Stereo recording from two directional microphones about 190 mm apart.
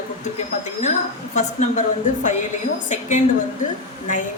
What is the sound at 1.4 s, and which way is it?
Speech, 40° left (ahead or behind).